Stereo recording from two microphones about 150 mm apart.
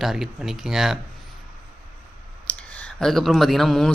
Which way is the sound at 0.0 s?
Centre (ahead or behind).